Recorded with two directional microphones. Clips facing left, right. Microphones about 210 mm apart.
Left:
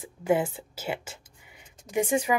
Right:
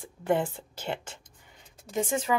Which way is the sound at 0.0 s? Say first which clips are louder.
Left 2 dB; 5° left (ahead or behind).